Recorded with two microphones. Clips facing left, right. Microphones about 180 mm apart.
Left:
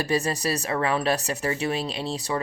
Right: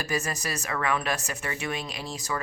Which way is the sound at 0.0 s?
30° left (ahead or behind).